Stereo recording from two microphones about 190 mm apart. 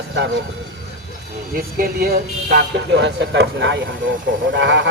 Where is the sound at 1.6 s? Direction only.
50° right (ahead or behind); by 4.9 s 70° right (ahead or behind).